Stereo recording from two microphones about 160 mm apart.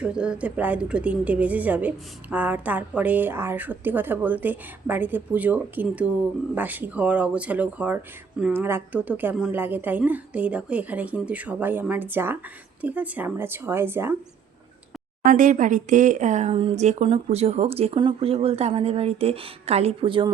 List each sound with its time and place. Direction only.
0.0 s a woman's voice: 5° right (ahead or behind)
15.2 s speech: 55° right (ahead or behind); by 20.3 s 30° right (ahead or behind)